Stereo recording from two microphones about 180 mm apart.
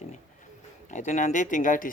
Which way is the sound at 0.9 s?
45° left (ahead or behind).